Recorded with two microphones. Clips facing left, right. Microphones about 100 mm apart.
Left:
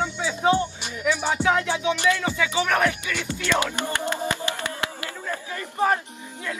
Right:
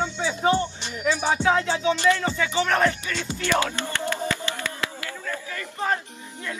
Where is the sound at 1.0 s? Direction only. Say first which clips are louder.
Right 1 dB; 20° right (ahead or behind).